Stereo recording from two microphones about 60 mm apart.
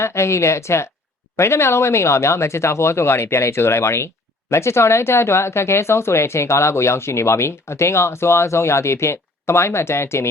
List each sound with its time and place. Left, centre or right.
0.0 s speech: left